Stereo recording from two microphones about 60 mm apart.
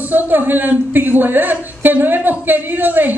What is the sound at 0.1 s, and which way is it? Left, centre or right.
Speech, right.